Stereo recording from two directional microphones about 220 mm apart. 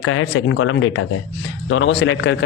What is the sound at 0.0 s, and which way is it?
A man's voice, 70° left (ahead or behind).